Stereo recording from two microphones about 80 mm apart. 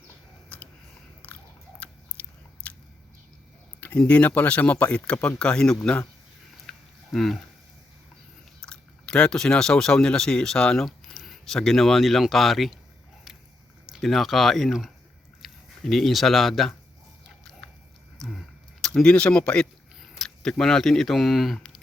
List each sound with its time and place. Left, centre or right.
0.5 s a sound: centre
2.6 s biting: centre
3.8 s speech: centre
6.7 s a sound: centre
8.6 s speech: centre
13.9 s speech: centre
18.2 s vehicle: centre
19.0 s speech: centre